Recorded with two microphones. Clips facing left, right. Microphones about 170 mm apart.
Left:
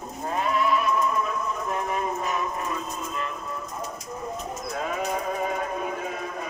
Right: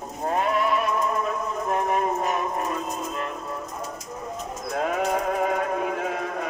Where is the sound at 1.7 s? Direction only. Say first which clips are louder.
Right 6 dB; 55° right (ahead or behind).